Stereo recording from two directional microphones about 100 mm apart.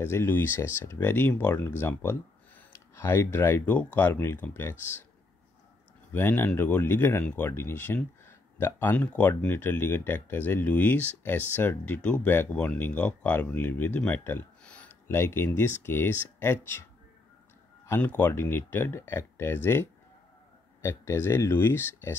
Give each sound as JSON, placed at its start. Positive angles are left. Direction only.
{"t": 0.0, "sound": "speech", "side_deg": 25}
{"t": 6.1, "sound": "speech", "side_deg": 20}
{"t": 15.0, "sound": "speech", "side_deg": 25}
{"t": 17.8, "sound": "speech", "side_deg": 20}